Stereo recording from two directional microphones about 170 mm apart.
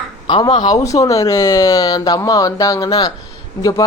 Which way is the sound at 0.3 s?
30° left (ahead or behind).